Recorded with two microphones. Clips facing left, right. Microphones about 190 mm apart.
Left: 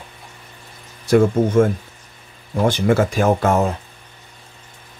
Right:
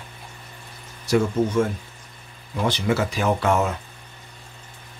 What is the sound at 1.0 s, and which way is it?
Speech, 55° left (ahead or behind).